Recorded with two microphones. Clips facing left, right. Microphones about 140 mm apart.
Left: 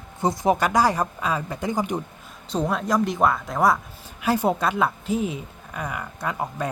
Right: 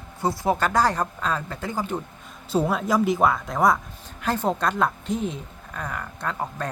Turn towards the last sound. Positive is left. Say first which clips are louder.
# left 2 dB
turn(degrees=10)  # may be behind; listen again after turning